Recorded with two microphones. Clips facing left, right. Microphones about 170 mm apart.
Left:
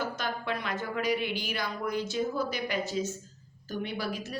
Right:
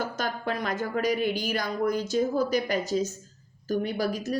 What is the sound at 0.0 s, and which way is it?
A woman's voice, 45° right (ahead or behind).